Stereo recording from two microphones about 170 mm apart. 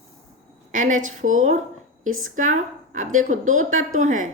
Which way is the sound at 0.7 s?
45° right (ahead or behind).